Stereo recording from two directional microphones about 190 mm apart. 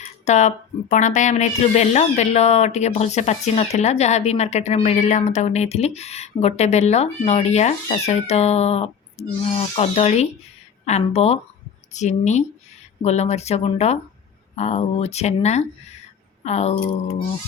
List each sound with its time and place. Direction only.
0.3 s speech: 35° left (ahead or behind)